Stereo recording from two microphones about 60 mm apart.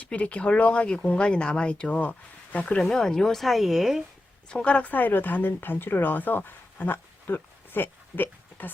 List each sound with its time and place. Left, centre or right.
0.0 s speech: left
2.8 s speech: centre
4.4 s speech: centre; by 8.7 s left